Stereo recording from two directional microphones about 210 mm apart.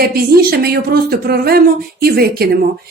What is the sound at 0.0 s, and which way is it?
Speech, 45° right (ahead or behind).